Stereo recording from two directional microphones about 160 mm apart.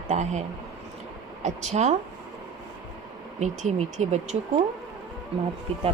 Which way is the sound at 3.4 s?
50° right (ahead or behind).